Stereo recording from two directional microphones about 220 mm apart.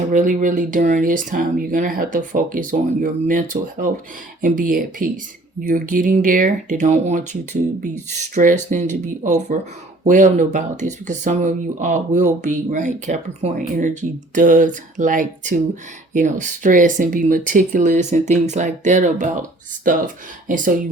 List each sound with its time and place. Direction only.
0.1 s speech: 35° right (ahead or behind)